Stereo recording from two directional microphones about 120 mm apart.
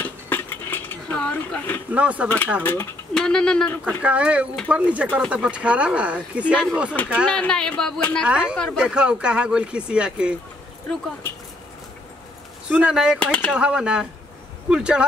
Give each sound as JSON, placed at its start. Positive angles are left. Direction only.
{"t": 0.0, "sound": "a sound", "side_deg": 15}
{"t": 1.9, "sound": "speech", "side_deg": -10}
{"t": 2.2, "sound": "a woman's voice", "side_deg": 15}
{"t": 3.2, "sound": "a woman's voice", "side_deg": 5}
{"t": 3.8, "sound": "speech", "side_deg": -10}
{"t": 7.2, "sound": "a woman's voice", "side_deg": 5}
{"t": 8.3, "sound": "speech", "side_deg": -10}
{"t": 12.6, "sound": "speech", "side_deg": -5}
{"t": 13.2, "sound": "a woman's voice", "side_deg": 10}
{"t": 13.5, "sound": "speech", "side_deg": -10}